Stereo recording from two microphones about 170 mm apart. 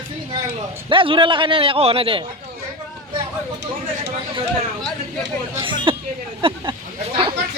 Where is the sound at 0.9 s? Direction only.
30° right (ahead or behind).